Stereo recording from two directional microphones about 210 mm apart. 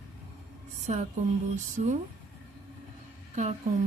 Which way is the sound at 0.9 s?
35° right (ahead or behind).